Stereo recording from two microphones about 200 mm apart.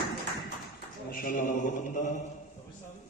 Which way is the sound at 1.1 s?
45° left (ahead or behind).